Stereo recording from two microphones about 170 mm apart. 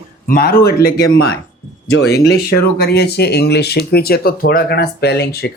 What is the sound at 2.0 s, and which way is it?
Speech, 70° left (ahead or behind).